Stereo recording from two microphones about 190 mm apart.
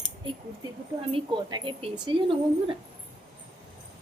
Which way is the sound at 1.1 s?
30° right (ahead or behind).